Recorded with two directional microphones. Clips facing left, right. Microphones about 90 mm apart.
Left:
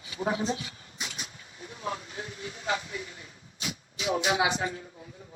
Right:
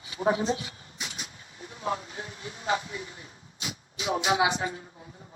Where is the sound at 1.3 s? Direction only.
35° right (ahead or behind).